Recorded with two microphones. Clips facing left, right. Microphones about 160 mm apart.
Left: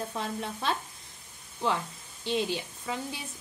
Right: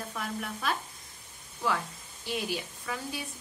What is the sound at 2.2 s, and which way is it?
A woman's voice, 25° left (ahead or behind).